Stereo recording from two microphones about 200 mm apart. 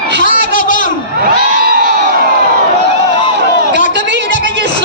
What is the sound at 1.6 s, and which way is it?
Crowd, 50° right (ahead or behind).